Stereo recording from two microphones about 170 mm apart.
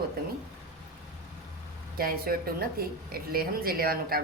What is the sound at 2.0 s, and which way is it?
A woman's voice, 60° right (ahead or behind).